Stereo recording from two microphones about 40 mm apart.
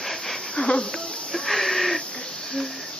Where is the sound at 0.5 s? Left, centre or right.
Left.